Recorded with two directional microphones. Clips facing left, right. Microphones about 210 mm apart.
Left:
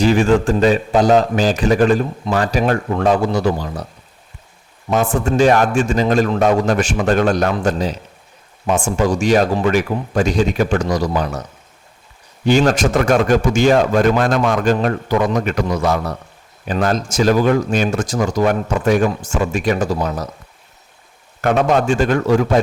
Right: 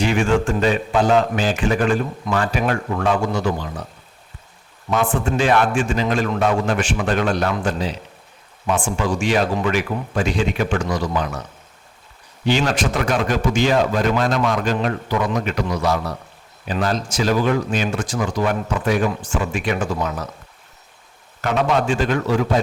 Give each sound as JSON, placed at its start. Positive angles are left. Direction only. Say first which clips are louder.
{"t": 0.0, "sound": "speech", "louder": "left 5 dB", "side_deg": 35}
{"t": 4.9, "sound": "speech", "louder": "left 3 dB", "side_deg": 45}
{"t": 12.5, "sound": "a man's voice", "louder": "left 5 dB", "side_deg": 45}
{"t": 21.4, "sound": "a man's voice", "louder": "left 4 dB", "side_deg": 45}